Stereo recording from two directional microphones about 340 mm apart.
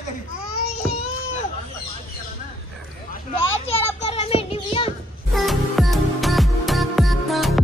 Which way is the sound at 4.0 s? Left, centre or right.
Centre.